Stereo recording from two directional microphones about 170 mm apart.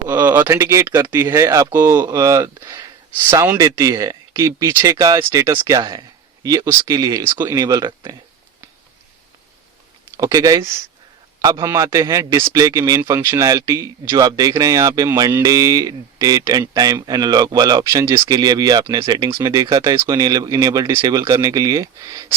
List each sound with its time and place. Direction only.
0.1 s a man's voice: 15° right (ahead or behind)
10.2 s a man's voice: 20° right (ahead or behind)